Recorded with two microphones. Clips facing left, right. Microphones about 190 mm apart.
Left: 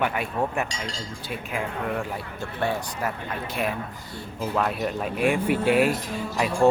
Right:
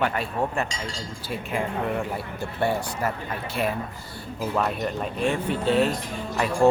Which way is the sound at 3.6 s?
5° left (ahead or behind).